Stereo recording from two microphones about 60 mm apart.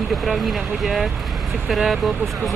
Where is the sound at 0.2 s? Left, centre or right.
Centre.